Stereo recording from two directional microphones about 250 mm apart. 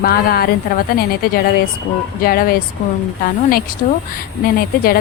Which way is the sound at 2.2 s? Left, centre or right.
Left.